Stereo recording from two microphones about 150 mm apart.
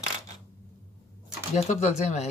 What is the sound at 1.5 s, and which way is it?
Speech, 45° left (ahead or behind).